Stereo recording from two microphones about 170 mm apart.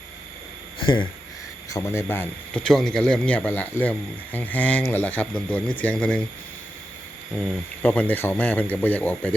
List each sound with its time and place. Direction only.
0.8 s speech: 30° left (ahead or behind)
1.7 s speech: 15° left (ahead or behind)
7.3 s speech: 10° left (ahead or behind)